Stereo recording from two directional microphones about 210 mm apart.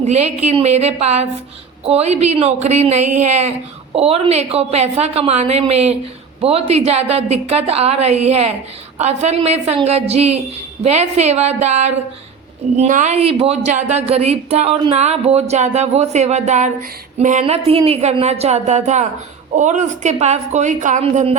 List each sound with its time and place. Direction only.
0.0 s a woman's voice: 30° right (ahead or behind)